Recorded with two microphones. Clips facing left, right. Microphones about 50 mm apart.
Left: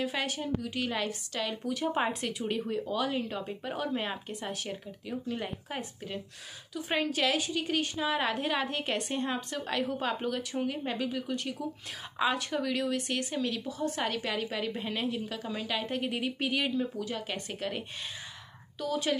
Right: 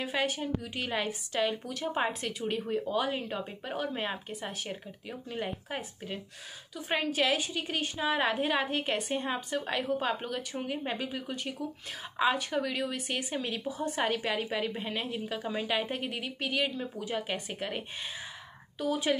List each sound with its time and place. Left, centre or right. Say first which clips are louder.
0.0 s a woman's voice: right 1 dB; centre
1.7 s a woman's voice: left 2 dB; centre
16.0 s speech: left 3 dB; centre
17.0 s a woman's voice: right 2 dB; centre